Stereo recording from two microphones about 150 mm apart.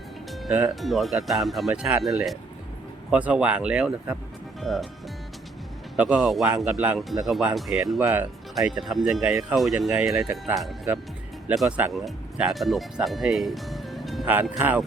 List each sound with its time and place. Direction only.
0.3 s speech: 5° right (ahead or behind)
6.0 s speech: 5° right (ahead or behind)
14.6 s speech: 10° right (ahead or behind)